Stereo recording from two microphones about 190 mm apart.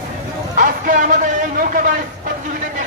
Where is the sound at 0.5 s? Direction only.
45° right (ahead or behind).